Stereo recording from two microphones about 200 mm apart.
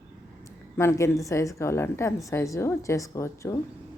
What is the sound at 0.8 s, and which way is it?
A woman's voice, 15° left (ahead or behind).